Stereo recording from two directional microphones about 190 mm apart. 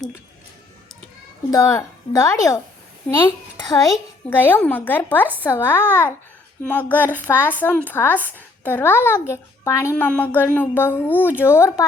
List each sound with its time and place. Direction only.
1.5 s a child's voice: 20° left (ahead or behind)